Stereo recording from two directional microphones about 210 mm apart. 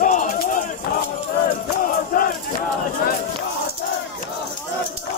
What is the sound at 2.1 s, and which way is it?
Battle cry, 45° left (ahead or behind).